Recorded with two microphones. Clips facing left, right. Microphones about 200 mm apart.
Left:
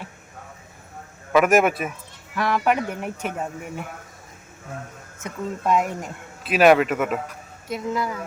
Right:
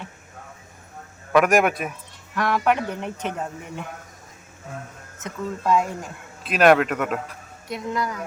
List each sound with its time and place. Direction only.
1.3 s speech: 5° left (ahead or behind)
5.2 s speech: 15° left (ahead or behind)
6.4 s speech: 5° left (ahead or behind)